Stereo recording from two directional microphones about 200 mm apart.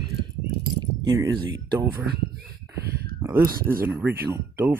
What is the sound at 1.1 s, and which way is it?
Speech, 20° right (ahead or behind).